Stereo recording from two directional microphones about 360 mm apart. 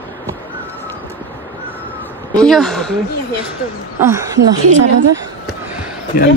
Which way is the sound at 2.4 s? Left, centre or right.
Centre.